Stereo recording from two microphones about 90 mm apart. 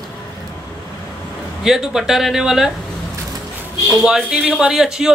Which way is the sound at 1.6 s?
5° right (ahead or behind).